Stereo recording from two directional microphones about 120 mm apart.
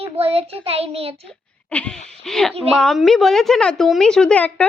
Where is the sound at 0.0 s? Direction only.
55° right (ahead or behind).